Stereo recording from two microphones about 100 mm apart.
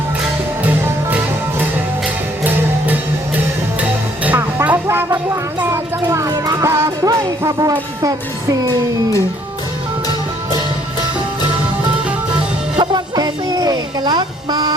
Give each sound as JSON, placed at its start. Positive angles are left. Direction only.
{"t": 0.6, "sound": "music", "side_deg": -15}
{"t": 5.6, "sound": "a sound", "side_deg": -25}
{"t": 6.3, "sound": "music", "side_deg": -35}
{"t": 12.8, "sound": "music", "side_deg": -45}